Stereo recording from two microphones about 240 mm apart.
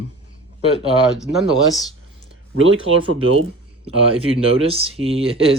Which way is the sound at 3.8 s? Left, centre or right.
Right.